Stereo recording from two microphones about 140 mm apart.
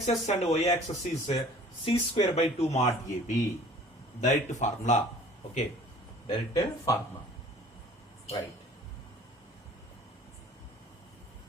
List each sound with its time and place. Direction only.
0.0 s speech: 50° left (ahead or behind)
6.2 s speech: 30° left (ahead or behind)